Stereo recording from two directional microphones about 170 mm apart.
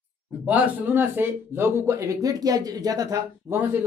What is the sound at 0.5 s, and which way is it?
Speech, 10° right (ahead or behind).